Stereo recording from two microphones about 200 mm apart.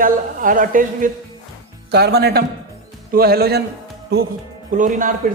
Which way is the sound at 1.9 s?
55° right (ahead or behind).